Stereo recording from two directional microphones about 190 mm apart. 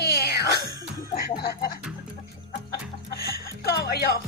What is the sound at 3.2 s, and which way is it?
Music, 55° left (ahead or behind).